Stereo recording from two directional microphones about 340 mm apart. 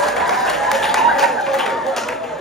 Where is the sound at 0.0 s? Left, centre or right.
Centre.